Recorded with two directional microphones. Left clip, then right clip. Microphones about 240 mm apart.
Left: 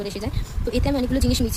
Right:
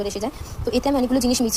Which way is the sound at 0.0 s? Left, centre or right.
Centre.